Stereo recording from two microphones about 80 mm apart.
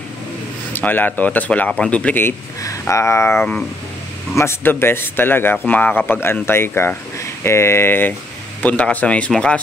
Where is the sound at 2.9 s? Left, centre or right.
Left.